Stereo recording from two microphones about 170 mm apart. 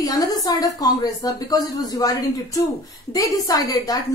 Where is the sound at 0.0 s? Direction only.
20° left (ahead or behind).